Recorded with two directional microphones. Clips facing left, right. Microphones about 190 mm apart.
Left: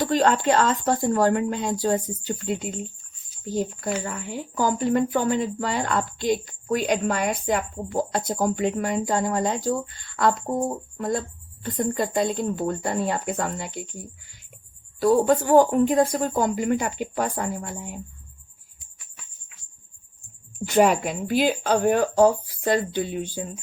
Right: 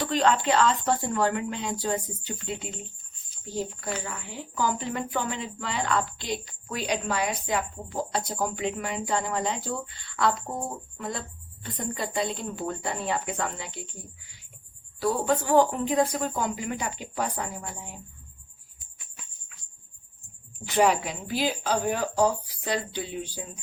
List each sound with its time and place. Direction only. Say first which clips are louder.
0.0 s speech: left 4 dB; 45° left (ahead or behind)
4.0 s speech: left 6 dB; 50° left (ahead or behind)
14.9 s speech: left 7 dB; 45° left (ahead or behind)
20.7 s speech: left 4 dB; 45° left (ahead or behind)